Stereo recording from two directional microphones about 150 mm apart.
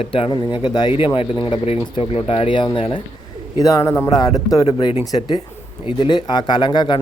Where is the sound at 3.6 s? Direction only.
25° left (ahead or behind).